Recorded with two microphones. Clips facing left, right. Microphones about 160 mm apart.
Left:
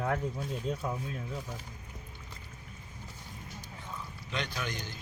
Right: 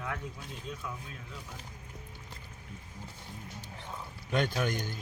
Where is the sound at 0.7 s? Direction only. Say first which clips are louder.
Left 6 dB; 40° left (ahead or behind).